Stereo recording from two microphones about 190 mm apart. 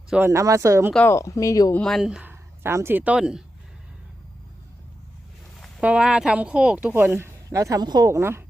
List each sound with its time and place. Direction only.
0.1 s speech: 15° right (ahead or behind)
0.9 s speech: 15° left (ahead or behind)
1.8 s speech: centre (ahead or behind)
5.5 s speech: centre (ahead or behind)